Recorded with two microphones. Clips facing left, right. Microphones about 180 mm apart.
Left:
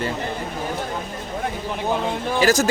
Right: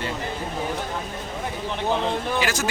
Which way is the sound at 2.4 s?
40° left (ahead or behind).